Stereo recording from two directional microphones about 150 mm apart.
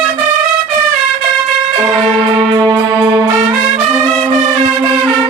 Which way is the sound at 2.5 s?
25° right (ahead or behind).